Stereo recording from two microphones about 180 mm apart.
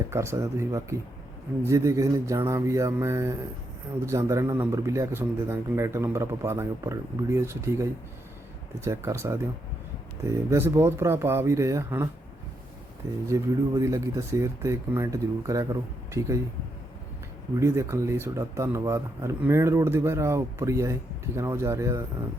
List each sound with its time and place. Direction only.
0.1 s a man's voice: 15° right (ahead or behind)
13.2 s a man's voice: 15° right (ahead or behind)
17.6 s a man's voice: 15° right (ahead or behind)